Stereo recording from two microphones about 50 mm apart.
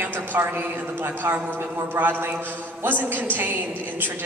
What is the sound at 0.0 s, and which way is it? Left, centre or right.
A woman's voice, right.